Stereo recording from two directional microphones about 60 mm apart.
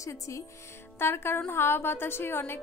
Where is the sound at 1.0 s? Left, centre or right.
Left.